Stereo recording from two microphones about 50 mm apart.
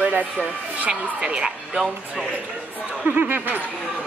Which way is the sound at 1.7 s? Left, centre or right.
Centre.